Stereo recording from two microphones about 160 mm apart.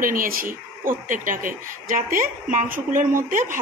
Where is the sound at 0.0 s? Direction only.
60° right (ahead or behind).